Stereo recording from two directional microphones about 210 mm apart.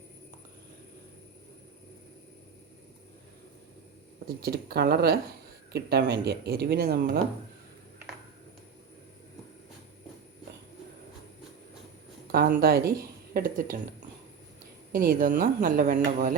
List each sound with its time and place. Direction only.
4.4 s speech: 45° right (ahead or behind)
12.3 s speech: 45° right (ahead or behind)
14.9 s speech: 45° right (ahead or behind)